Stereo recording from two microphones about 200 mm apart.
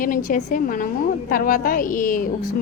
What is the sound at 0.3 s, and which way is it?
A woman's voice, 40° left (ahead or behind).